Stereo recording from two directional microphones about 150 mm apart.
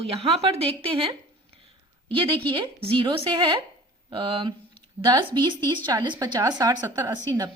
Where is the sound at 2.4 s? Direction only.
35° right (ahead or behind).